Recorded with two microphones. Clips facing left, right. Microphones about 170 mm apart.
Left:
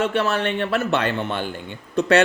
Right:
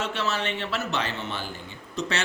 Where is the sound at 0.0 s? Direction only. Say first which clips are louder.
Left 7 dB; 55° left (ahead or behind).